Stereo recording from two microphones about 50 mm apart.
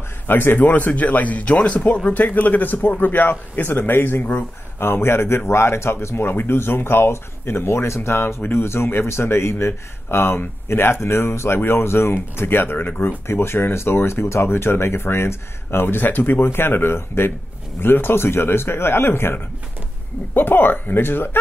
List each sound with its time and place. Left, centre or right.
0.3 s speech: left
4.7 s speech: left
13.3 s speech: left
16.4 s speech: left